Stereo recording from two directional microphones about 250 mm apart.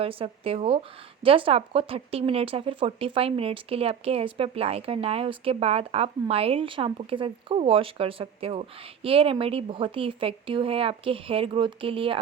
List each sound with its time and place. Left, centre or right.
0.0 s speech: right